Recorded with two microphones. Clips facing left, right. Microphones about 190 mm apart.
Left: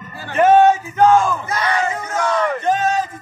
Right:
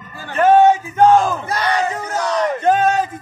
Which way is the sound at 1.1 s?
35° right (ahead or behind).